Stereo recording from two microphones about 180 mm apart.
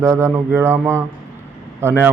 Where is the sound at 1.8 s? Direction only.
15° right (ahead or behind).